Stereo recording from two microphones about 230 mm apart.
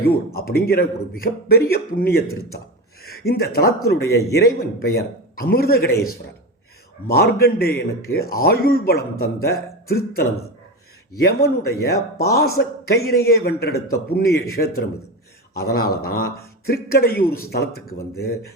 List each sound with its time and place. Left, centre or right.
0.3 s speech: left
7.1 s speech: left
11.4 s a man's voice: left